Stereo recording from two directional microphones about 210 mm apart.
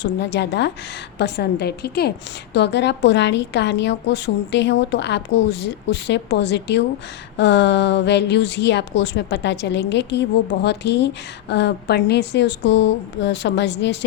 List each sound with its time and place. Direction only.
0.0 s a woman's voice: 55° left (ahead or behind)